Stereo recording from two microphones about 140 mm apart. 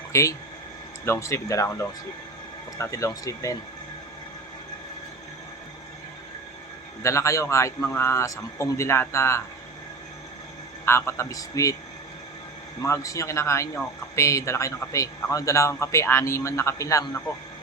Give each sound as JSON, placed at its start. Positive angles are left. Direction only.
{"t": 0.1, "sound": "speech", "side_deg": 20}
{"t": 7.0, "sound": "speech", "side_deg": 20}
{"t": 10.8, "sound": "speech", "side_deg": 20}
{"t": 12.8, "sound": "speech", "side_deg": 20}